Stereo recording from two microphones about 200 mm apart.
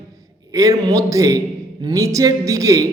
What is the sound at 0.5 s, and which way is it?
A woman's voice, 15° right (ahead or behind).